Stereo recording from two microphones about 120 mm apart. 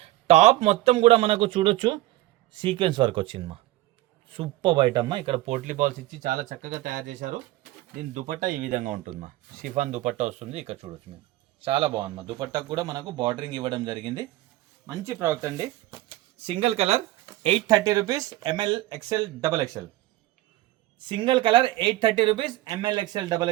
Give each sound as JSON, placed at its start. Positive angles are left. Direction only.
{"t": 0.0, "sound": "speech", "side_deg": -70}
{"t": 5.5, "sound": "speech", "side_deg": -90}
{"t": 11.6, "sound": "speech", "side_deg": -50}
{"t": 14.8, "sound": "speech", "side_deg": -25}
{"t": 16.4, "sound": "speech", "side_deg": -55}
{"t": 17.4, "sound": "speech", "side_deg": -40}
{"t": 21.0, "sound": "speech", "side_deg": -45}